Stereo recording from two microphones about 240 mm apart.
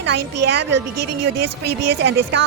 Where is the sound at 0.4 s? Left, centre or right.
Right.